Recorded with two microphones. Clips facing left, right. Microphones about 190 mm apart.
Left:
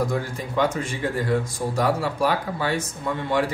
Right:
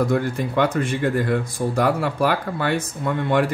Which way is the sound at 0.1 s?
60° right (ahead or behind).